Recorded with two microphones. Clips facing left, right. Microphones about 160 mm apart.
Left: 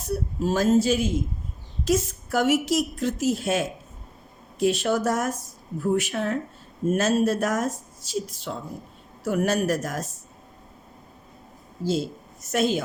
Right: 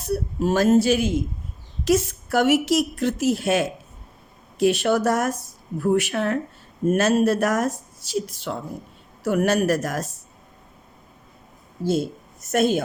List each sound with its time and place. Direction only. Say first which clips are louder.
0.1 s a woman's voice: right 3 dB; 70° right (ahead or behind)
11.8 s speech: right 3 dB; 55° right (ahead or behind)